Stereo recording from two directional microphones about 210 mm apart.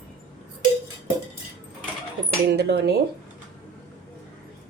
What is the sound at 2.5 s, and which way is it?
Speech, 50° right (ahead or behind).